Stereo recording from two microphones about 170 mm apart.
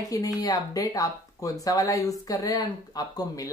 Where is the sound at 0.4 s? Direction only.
20° left (ahead or behind).